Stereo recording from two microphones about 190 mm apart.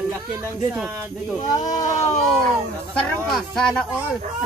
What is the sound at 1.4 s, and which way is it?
Speech, 20° left (ahead or behind).